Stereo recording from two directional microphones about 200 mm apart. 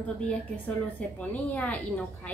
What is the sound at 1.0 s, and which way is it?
A woman's voice, 5° left (ahead or behind).